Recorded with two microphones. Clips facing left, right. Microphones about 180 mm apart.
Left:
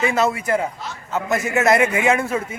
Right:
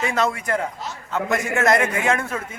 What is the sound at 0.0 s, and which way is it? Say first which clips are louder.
A man's voice: left 3 dB; 5° left (ahead or behind).